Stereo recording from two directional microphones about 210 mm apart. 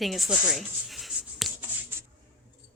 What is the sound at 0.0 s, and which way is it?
Speech, centre (ahead or behind).